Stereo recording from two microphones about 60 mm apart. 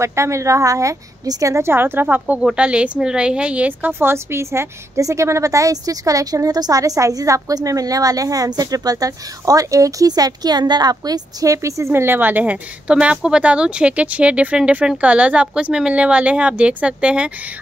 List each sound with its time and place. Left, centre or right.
0.0 s a woman's voice: right
1.5 s a woman's voice: right
2.4 s a woman's voice: centre
4.1 s a woman's voice: right
11.9 s a woman's voice: right; by 17.3 s centre